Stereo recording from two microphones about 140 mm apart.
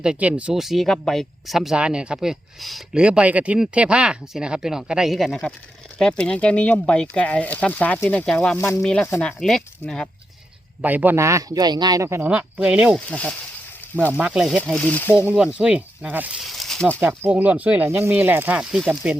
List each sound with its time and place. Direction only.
0.0 s speech: 5° right (ahead or behind)
8.5 s speech: 20° left (ahead or behind)
8.8 s speech: 5° left (ahead or behind)
9.0 s speech: 15° left (ahead or behind)
9.4 s speech: 5° left (ahead or behind)
10.8 s speech: 10° right (ahead or behind)
13.1 s speech: 10° left (ahead or behind)
14.1 s speech: 5° right (ahead or behind)
14.6 s speech: 10° left (ahead or behind)
15.1 s speech: 10° right (ahead or behind)
16.4 s speech: centre (ahead or behind)
17.0 s speech: 10° right (ahead or behind)